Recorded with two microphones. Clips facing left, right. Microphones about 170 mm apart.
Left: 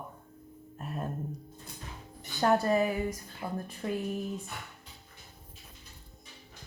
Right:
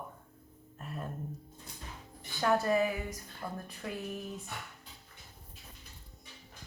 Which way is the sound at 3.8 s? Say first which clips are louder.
Left 7 dB; 30° left (ahead or behind).